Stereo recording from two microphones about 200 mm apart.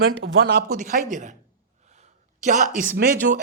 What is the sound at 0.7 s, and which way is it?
Speech, 40° right (ahead or behind).